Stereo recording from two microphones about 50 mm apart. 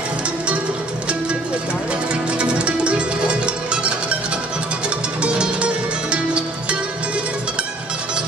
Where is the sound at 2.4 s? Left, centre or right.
Right.